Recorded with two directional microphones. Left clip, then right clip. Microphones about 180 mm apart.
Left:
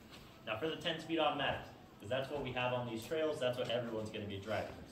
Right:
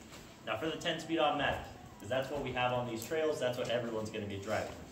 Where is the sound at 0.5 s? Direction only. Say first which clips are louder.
Right 3 dB; 15° right (ahead or behind).